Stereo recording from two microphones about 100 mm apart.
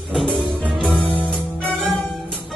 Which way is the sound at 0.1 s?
5° left (ahead or behind).